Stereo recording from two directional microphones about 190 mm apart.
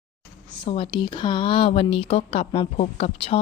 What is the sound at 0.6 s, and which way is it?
Speech, 25° left (ahead or behind).